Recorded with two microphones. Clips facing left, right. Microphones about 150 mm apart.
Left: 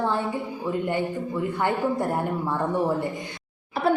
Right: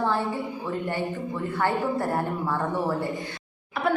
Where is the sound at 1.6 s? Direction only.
15° left (ahead or behind).